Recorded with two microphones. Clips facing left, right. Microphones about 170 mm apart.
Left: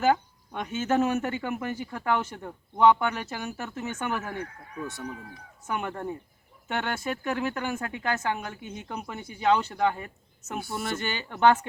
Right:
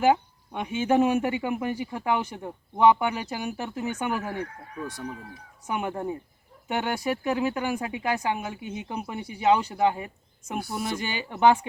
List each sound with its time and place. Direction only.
0.0 s speech: 10° right (ahead or behind)
5.3 s speech: 15° right (ahead or behind)